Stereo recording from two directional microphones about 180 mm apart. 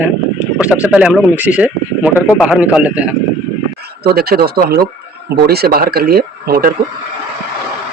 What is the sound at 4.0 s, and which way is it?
Speech, 60° right (ahead or behind).